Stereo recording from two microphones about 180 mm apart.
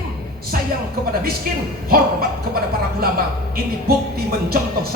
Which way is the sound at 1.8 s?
55° right (ahead or behind).